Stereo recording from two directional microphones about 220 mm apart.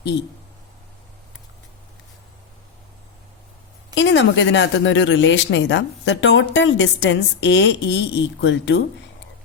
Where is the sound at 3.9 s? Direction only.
55° left (ahead or behind).